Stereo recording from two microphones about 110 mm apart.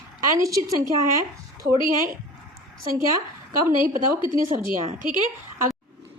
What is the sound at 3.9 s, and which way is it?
Speech, 50° left (ahead or behind).